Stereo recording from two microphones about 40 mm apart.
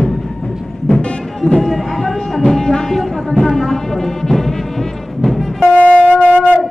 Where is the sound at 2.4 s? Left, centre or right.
Centre.